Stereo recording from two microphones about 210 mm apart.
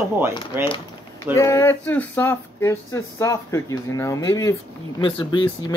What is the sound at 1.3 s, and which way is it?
Speech, 15° left (ahead or behind).